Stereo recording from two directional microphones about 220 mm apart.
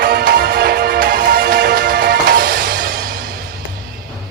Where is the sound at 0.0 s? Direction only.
45° right (ahead or behind).